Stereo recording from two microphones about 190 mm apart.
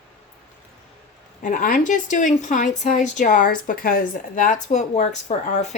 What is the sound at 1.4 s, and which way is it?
Speech, 45° left (ahead or behind).